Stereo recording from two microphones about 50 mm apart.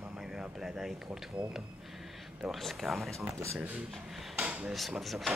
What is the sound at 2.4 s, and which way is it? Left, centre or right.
Speech, centre.